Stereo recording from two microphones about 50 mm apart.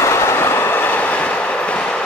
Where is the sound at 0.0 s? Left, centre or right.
Left.